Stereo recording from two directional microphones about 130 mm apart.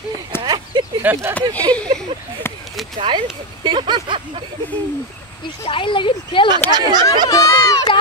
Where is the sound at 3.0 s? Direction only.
35° right (ahead or behind).